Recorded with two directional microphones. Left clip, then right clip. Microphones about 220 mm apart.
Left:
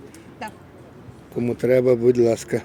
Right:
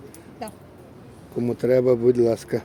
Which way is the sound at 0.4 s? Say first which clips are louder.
Left 2 dB; 50° right (ahead or behind).